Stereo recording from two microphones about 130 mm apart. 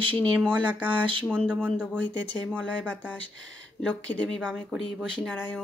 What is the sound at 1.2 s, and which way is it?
Speech, 10° left (ahead or behind).